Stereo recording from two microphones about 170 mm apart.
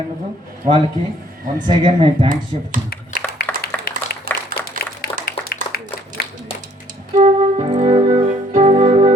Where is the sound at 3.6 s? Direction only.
65° left (ahead or behind).